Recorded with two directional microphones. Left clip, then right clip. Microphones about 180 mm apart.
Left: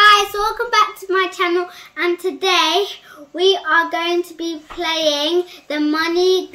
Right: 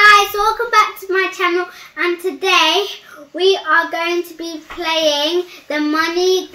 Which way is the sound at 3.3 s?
25° left (ahead or behind).